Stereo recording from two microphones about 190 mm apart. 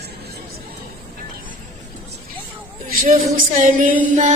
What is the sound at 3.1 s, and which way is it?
Music, 40° right (ahead or behind).